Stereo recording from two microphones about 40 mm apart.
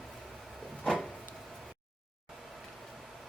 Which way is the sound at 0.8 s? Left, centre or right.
Centre.